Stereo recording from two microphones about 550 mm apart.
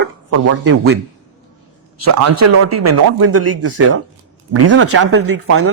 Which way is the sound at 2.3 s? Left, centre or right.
Right.